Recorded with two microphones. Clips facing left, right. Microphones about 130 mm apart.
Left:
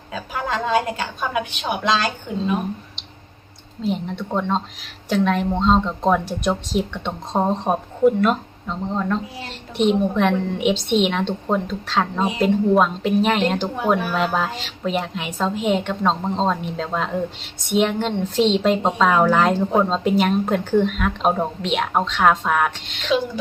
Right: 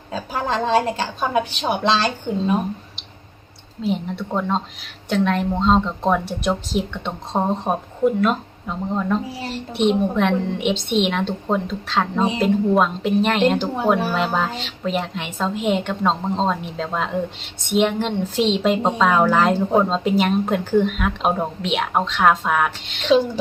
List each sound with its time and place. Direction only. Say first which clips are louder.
0.1 s a woman's voice: right 2 dB; 30° right (ahead or behind)
3.8 s a woman's voice: right 1 dB; centre (ahead or behind)
23.0 s a woman's voice: right 4 dB; 30° right (ahead or behind)